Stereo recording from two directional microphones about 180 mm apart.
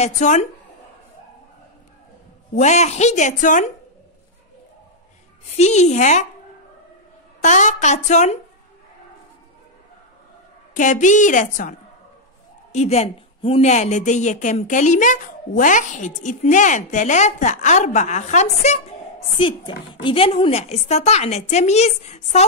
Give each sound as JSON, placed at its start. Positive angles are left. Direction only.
{"t": 0.0, "sound": "a woman's voice", "side_deg": 40}
{"t": 2.5, "sound": "a woman's voice", "side_deg": 40}
{"t": 5.6, "sound": "a woman's voice", "side_deg": 40}
{"t": 7.4, "sound": "a woman's voice", "side_deg": 40}
{"t": 10.7, "sound": "a woman's voice", "side_deg": 45}
{"t": 12.7, "sound": "a woman's voice", "side_deg": 35}
{"t": 19.3, "sound": "a woman's voice", "side_deg": 25}